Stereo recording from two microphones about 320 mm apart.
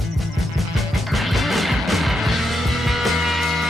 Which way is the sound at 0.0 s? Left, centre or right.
Centre.